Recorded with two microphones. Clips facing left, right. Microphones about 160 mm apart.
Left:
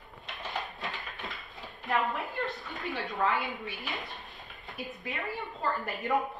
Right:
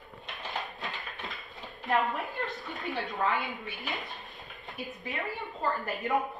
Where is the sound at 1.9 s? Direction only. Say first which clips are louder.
Right 2 dB; centre (ahead or behind).